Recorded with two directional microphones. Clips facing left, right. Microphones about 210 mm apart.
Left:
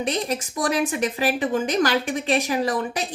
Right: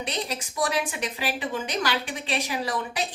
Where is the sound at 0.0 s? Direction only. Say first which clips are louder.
Left 6 dB; 50° left (ahead or behind).